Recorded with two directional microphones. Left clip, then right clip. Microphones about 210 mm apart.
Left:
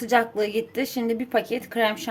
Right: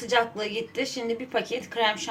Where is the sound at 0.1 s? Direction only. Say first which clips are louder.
Left 3 dB; 55° left (ahead or behind).